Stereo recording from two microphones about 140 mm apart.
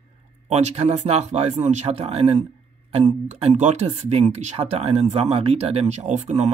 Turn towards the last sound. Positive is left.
turn(degrees=-55)  # may be behind; listen again after turning